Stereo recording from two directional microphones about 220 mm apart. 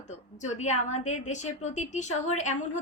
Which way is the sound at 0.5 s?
30° left (ahead or behind).